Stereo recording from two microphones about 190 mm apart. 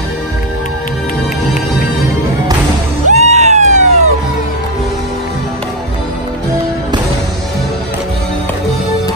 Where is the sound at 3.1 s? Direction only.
35° right (ahead or behind).